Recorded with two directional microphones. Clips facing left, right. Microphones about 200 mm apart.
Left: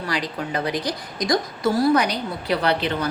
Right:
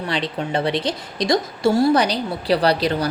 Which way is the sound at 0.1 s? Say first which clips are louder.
Right 3 dB; 25° right (ahead or behind).